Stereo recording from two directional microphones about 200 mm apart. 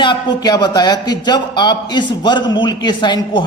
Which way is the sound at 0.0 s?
20° left (ahead or behind).